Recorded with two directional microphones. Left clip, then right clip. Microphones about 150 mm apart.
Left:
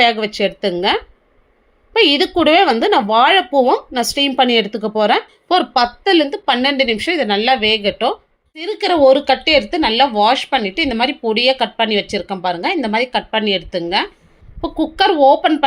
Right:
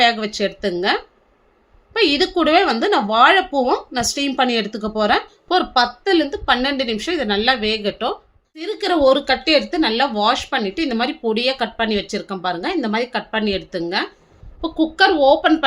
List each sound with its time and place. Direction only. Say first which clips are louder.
0.0 s speech: left 3 dB; 20° left (ahead or behind)